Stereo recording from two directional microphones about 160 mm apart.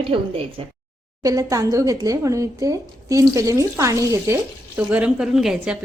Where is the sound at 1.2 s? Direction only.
20° right (ahead or behind); by 5.8 s 5° right (ahead or behind).